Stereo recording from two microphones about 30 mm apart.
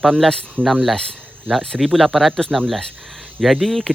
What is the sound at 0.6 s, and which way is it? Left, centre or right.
Speech, right.